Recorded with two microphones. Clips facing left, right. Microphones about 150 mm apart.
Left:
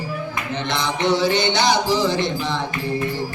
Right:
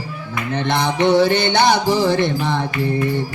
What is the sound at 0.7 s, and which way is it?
Music, 55° right (ahead or behind).